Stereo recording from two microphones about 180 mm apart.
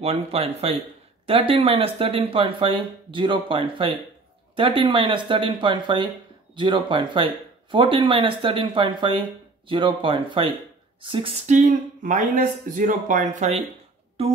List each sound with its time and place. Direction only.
0.0 s speech: 35° right (ahead or behind)